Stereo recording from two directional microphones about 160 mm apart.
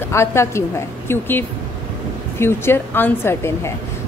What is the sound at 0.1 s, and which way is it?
A woman's voice, 15° left (ahead or behind).